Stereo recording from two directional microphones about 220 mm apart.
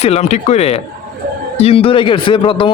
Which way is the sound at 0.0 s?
30° left (ahead or behind).